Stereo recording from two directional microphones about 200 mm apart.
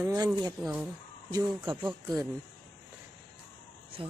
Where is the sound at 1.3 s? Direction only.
15° right (ahead or behind).